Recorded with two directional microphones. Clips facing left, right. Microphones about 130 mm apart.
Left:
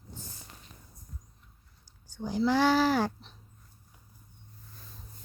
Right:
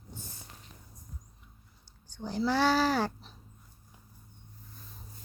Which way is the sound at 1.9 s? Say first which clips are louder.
Left 3 dB; 10° left (ahead or behind).